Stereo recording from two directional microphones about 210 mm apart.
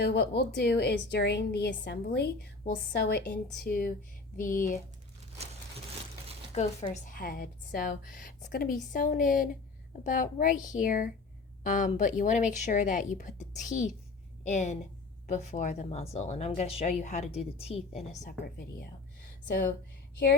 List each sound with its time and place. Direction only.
0.0 s a woman's voice: 50° left (ahead or behind)
6.5 s a woman's voice: 35° left (ahead or behind)